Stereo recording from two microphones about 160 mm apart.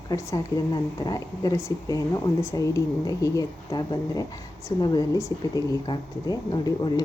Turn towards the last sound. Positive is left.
turn(degrees=25)  # may be behind; listen again after turning